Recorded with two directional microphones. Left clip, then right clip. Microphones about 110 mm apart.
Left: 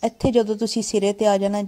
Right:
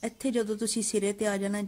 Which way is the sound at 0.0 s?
30° left (ahead or behind).